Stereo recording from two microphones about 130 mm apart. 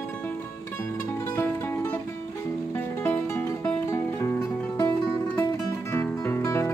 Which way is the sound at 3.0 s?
20° left (ahead or behind).